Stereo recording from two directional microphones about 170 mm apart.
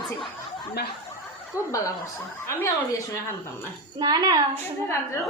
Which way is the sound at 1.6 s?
10° right (ahead or behind).